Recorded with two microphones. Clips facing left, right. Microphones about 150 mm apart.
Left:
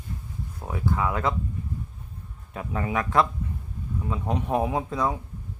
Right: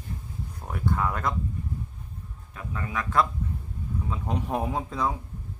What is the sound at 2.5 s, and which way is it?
Speech, 30° left (ahead or behind).